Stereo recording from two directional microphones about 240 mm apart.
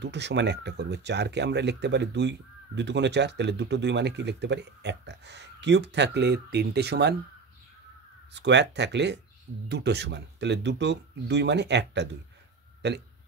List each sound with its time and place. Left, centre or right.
0.0 s speech: right
8.3 s speech: right